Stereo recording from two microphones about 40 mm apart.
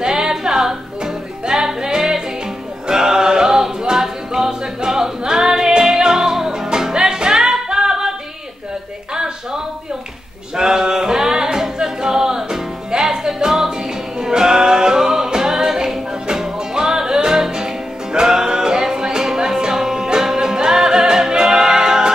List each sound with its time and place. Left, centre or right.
0.0 s music: centre
9.1 s a sound: centre
10.5 s singing: centre
13.1 s music: centre